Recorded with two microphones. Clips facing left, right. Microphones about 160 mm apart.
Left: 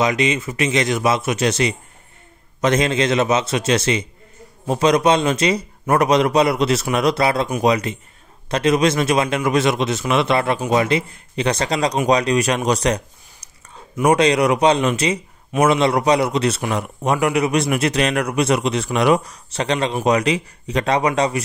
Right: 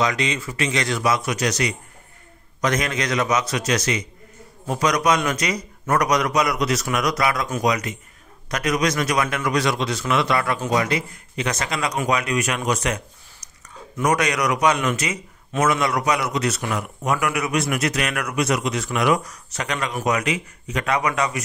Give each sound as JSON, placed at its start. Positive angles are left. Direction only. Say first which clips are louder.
{"t": 0.0, "sound": "a man's voice", "louder": "left 4 dB", "side_deg": 20}